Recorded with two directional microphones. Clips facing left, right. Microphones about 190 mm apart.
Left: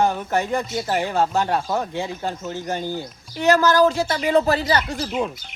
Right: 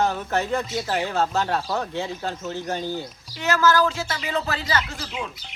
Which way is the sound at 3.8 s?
40° left (ahead or behind).